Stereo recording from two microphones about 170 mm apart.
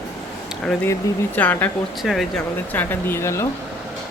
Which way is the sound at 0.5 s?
5° left (ahead or behind).